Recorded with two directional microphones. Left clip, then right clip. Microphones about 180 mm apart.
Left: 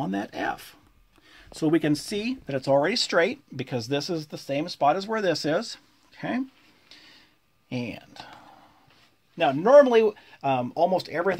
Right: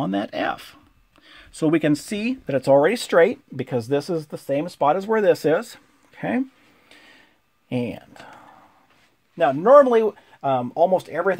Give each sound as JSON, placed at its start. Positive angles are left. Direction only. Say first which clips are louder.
{"t": 0.0, "sound": "speech", "louder": "right 5 dB", "side_deg": -45}
{"t": 6.9, "sound": "a sound", "louder": "right 2 dB", "side_deg": -55}
{"t": 7.7, "sound": "speech", "louder": "right 6 dB", "side_deg": -45}
{"t": 9.4, "sound": "speech", "louder": "right 3 dB", "side_deg": -30}